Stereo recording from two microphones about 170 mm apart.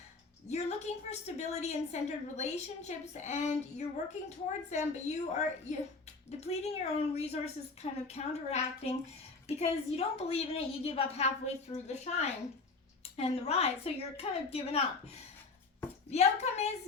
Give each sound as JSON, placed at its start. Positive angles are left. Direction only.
{"t": 0.4, "sound": "a woman's voice", "side_deg": 40}